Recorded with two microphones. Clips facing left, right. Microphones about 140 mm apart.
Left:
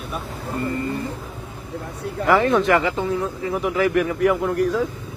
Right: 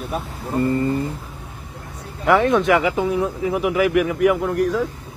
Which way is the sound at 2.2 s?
Centre (ahead or behind).